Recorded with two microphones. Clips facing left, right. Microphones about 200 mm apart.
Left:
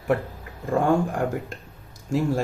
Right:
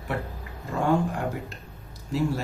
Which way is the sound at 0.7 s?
45° left (ahead or behind).